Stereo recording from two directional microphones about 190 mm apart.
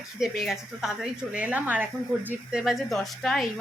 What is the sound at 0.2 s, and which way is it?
Speech, centre (ahead or behind).